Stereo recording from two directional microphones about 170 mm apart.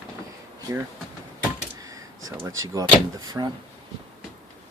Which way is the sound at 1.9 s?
15° right (ahead or behind).